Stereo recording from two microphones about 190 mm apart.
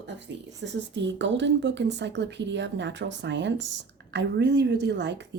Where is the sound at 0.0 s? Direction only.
70° right (ahead or behind).